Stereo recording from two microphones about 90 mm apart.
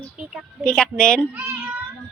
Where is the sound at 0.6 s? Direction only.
10° left (ahead or behind).